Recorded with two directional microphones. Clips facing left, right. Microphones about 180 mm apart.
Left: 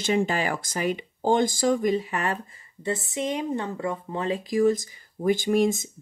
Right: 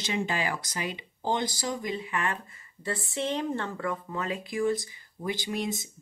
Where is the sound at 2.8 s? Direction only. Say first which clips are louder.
Left 3 dB; 20° left (ahead or behind).